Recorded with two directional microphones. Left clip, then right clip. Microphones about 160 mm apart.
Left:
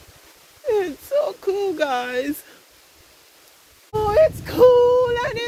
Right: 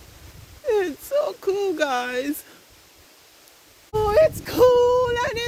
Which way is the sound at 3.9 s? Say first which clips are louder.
Left 1 dB; 60° right (ahead or behind).